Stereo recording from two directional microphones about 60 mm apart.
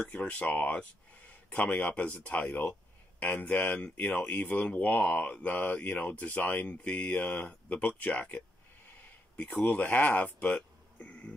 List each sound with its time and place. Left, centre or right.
0.0 s speech: left